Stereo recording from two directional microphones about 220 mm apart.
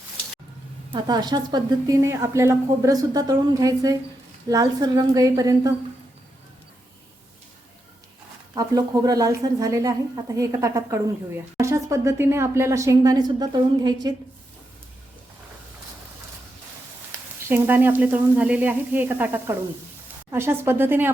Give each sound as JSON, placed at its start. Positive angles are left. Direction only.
{"t": 0.9, "sound": "a woman's voice", "side_deg": -20}
{"t": 8.5, "sound": "a woman's voice", "side_deg": -15}
{"t": 17.5, "sound": "a woman's voice", "side_deg": -10}